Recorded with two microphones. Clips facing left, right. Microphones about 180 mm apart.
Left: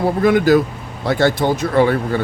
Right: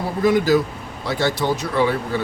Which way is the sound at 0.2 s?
55° left (ahead or behind).